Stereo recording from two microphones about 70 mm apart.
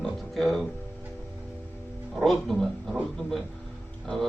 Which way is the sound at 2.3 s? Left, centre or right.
Centre.